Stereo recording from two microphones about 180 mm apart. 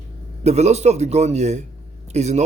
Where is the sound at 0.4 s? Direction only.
35° right (ahead or behind).